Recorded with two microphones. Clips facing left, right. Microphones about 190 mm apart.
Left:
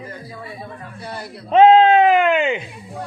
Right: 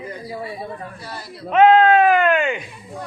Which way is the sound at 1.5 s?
25° left (ahead or behind).